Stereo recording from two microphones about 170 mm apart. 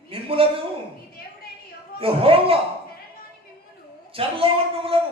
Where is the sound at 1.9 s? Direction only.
35° right (ahead or behind).